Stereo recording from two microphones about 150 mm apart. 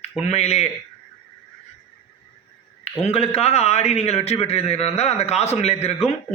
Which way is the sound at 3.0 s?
40° left (ahead or behind).